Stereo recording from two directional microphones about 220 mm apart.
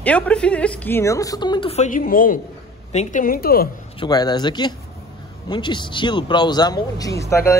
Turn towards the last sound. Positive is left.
turn(degrees=10)  # may be behind; listen again after turning